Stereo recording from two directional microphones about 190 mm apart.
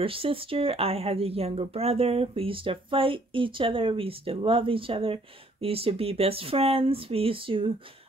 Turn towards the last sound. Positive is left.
turn(degrees=-30)  # may be behind; listen again after turning